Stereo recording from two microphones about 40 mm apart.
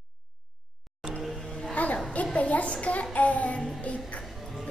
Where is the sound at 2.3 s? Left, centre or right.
Left.